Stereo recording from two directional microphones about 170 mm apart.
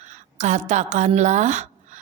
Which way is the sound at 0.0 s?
45° right (ahead or behind).